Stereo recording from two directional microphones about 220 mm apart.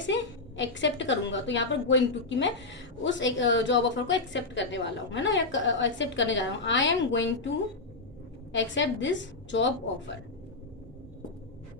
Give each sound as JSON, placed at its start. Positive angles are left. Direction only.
{"t": 0.1, "sound": "a woman's voice", "side_deg": 55}
{"t": 8.5, "sound": "a woman's voice", "side_deg": 55}